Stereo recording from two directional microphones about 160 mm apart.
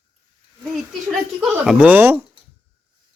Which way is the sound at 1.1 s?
Centre (ahead or behind).